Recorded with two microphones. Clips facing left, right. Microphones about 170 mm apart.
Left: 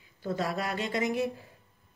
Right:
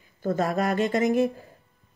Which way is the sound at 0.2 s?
45° right (ahead or behind).